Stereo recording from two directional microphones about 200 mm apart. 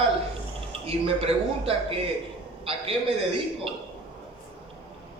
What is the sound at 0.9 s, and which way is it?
A man's voice, 30° right (ahead or behind).